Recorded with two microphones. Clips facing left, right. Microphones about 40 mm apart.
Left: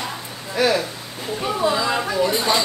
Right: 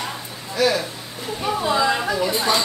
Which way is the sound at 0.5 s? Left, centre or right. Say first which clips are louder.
Left 1 dB; centre.